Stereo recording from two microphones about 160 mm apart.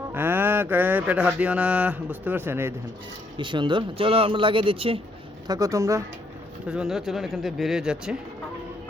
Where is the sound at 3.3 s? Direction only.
30° right (ahead or behind).